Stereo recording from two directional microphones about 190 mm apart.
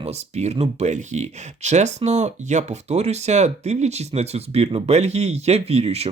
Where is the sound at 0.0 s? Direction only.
35° right (ahead or behind).